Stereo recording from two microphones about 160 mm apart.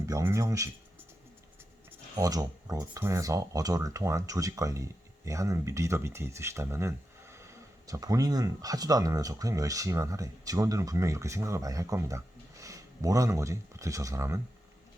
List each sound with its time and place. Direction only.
0.0 s speech: 20° right (ahead or behind)
2.1 s speech: 20° right (ahead or behind)